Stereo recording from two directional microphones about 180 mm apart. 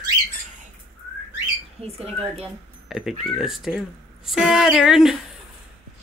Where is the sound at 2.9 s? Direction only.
Centre (ahead or behind).